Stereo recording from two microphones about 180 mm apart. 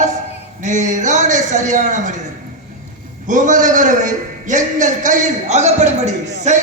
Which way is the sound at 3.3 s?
45° right (ahead or behind).